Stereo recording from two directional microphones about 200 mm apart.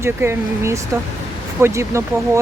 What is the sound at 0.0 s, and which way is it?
Speech, 10° right (ahead or behind).